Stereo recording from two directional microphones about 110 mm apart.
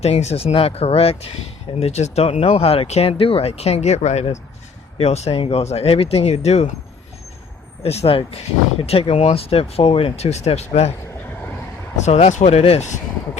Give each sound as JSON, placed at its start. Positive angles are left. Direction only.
{"t": 0.0, "sound": "speech", "side_deg": 75}
{"t": 1.8, "sound": "speech", "side_deg": 85}
{"t": 4.9, "sound": "speech", "side_deg": 75}
{"t": 7.8, "sound": "speech", "side_deg": 65}
{"t": 11.9, "sound": "speech", "side_deg": 90}